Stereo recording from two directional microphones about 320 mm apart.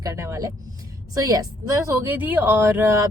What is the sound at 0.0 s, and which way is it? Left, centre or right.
Speech, centre.